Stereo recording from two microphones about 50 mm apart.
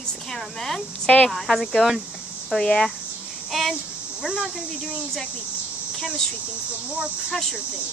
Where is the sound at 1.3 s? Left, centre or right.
Centre.